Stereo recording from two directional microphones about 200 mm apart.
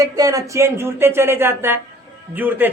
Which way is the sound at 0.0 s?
15° right (ahead or behind).